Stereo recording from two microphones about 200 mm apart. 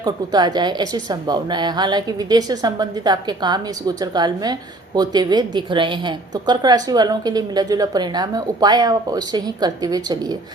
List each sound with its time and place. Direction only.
0.0 s a woman's voice: 20° right (ahead or behind)